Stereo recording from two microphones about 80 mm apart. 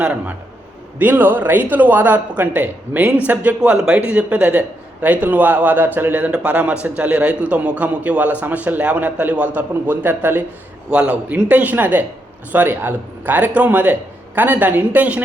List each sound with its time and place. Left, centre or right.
0.0 s speech: centre
10.8 s speech: centre